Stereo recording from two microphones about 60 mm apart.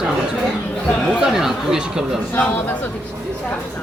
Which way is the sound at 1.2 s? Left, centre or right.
Centre.